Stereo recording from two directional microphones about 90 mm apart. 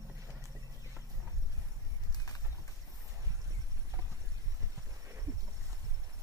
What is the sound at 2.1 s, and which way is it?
Horse, 40° left (ahead or behind).